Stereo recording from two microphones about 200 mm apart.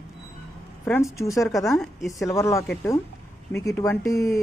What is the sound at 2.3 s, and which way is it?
Speech, 15° left (ahead or behind).